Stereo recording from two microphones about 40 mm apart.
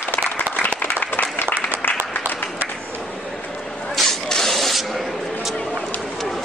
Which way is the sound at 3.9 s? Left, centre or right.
Centre.